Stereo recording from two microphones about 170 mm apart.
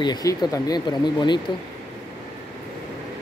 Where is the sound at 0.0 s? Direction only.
20° left (ahead or behind).